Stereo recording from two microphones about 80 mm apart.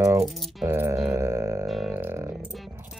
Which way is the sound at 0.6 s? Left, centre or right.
Right.